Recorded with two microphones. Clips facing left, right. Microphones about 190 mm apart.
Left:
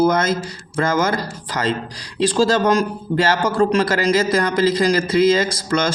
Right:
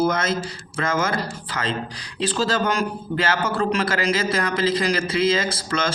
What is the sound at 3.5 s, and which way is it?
Speech, 45° left (ahead or behind).